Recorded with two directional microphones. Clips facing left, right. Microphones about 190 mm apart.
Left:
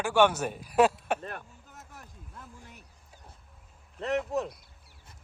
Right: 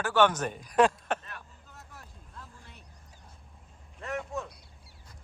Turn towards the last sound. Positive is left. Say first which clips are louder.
# left 6 dB
turn(degrees=35)  # may be behind; listen again after turning